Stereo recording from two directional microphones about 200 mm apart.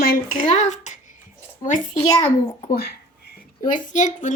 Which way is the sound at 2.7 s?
50° left (ahead or behind).